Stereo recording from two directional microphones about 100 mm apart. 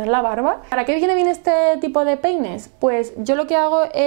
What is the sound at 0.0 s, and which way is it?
A woman's voice, 15° right (ahead or behind).